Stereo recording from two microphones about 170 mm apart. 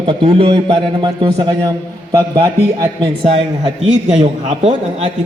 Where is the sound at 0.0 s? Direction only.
30° right (ahead or behind).